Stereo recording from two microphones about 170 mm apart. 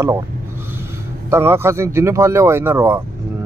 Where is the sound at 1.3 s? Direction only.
15° right (ahead or behind).